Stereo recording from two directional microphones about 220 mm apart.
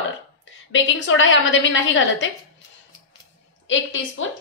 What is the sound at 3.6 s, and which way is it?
Speech, 60° left (ahead or behind).